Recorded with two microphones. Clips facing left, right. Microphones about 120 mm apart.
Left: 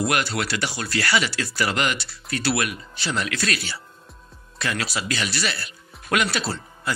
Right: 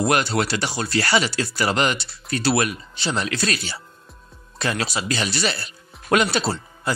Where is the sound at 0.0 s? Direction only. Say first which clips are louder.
Right 4 dB; 30° right (ahead or behind).